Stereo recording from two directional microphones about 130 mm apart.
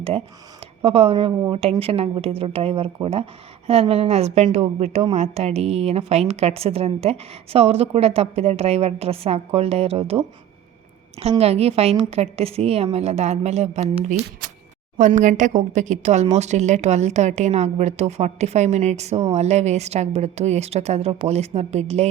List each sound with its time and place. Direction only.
0.8 s a woman's voice: 50° right (ahead or behind)
14.9 s a woman's voice: 70° right (ahead or behind)